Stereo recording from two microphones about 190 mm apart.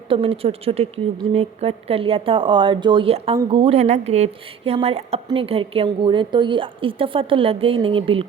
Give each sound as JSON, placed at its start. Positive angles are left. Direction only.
{"t": 0.1, "sound": "speech", "side_deg": -30}